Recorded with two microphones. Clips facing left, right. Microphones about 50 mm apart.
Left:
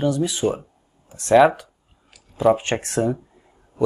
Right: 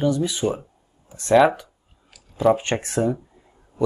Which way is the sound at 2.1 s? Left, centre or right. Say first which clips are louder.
Left 1 dB; centre.